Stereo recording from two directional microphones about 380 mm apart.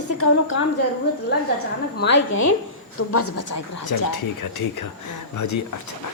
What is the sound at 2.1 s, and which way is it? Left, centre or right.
Speech, left.